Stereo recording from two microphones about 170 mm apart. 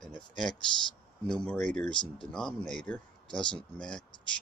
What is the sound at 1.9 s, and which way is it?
Speech, 30° left (ahead or behind).